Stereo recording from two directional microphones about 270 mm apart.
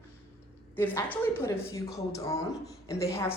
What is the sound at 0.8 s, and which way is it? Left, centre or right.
A man's voice, centre.